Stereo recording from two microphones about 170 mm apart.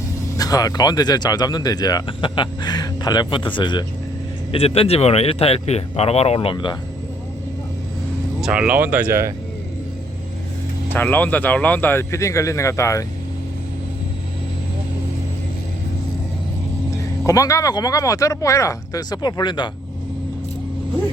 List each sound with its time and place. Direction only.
0.3 s speech: 20° left (ahead or behind)
8.4 s speech: 5° right (ahead or behind)
10.9 s a man's voice: 10° left (ahead or behind)
17.2 s speech: 20° left (ahead or behind)